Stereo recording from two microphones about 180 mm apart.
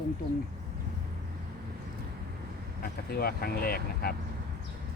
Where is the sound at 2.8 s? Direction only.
60° left (ahead or behind).